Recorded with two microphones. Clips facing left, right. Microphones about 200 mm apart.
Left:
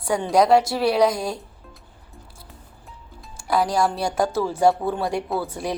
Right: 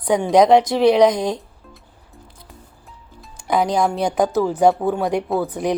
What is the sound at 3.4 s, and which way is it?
A woman's voice, 20° right (ahead or behind).